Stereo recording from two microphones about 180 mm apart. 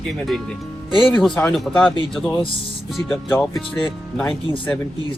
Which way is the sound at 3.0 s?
15° left (ahead or behind).